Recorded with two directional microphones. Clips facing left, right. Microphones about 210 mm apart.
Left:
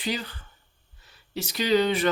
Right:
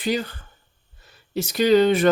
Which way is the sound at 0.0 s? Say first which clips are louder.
Right 6 dB; 50° right (ahead or behind).